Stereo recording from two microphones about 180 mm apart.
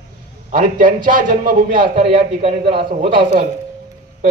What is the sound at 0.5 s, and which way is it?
A man's voice, 50° right (ahead or behind).